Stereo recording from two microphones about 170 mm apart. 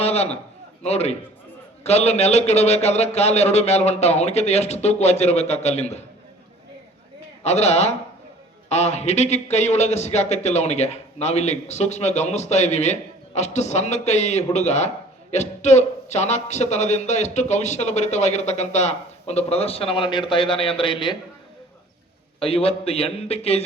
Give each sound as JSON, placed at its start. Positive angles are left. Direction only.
{"t": 0.0, "sound": "a sound", "side_deg": 40}
{"t": 0.8, "sound": "speech", "side_deg": 40}
{"t": 7.4, "sound": "speech", "side_deg": 40}
{"t": 22.4, "sound": "speech", "side_deg": 35}